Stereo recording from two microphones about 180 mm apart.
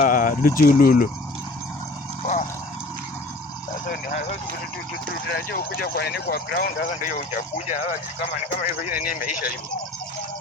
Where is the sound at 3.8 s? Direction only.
45° left (ahead or behind).